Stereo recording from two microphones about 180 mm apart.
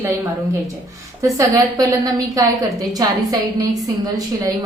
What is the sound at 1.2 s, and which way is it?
A woman's voice, 20° right (ahead or behind).